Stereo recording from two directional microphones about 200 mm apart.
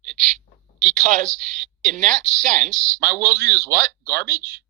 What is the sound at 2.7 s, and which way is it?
Speech, 5° left (ahead or behind).